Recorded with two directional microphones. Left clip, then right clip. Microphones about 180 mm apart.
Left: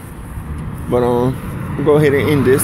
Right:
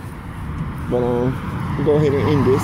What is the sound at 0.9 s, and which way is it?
Speech, 15° left (ahead or behind).